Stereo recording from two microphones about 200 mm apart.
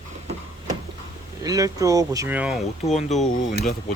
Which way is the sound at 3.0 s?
35° left (ahead or behind).